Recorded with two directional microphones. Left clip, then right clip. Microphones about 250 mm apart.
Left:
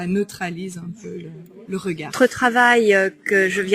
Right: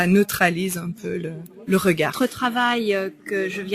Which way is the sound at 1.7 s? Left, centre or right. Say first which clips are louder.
Right 8 dB; right.